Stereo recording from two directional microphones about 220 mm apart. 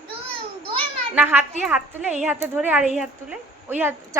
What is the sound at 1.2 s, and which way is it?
A woman's voice, 10° right (ahead or behind).